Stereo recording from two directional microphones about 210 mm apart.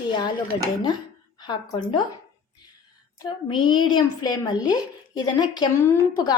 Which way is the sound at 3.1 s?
20° left (ahead or behind).